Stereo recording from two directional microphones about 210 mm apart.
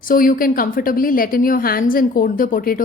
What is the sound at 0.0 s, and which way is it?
A woman's voice, 40° left (ahead or behind).